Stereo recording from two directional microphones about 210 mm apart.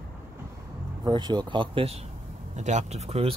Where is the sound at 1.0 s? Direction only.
20° right (ahead or behind).